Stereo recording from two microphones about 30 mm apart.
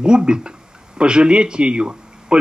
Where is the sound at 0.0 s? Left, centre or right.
Right.